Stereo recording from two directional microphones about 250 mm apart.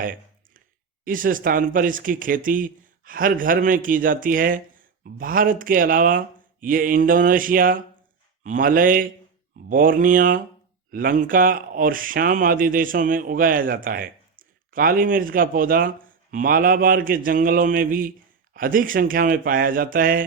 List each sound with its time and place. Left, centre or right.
0.0 s clicking: right
1.0 s speech: right